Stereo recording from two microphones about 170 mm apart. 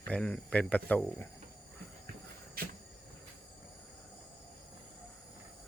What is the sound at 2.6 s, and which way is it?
Cupboard open or close, 60° right (ahead or behind).